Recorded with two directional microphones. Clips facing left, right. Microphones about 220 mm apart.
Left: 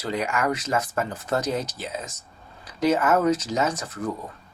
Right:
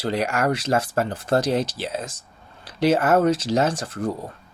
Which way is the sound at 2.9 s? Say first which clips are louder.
Right 3 dB; 30° right (ahead or behind).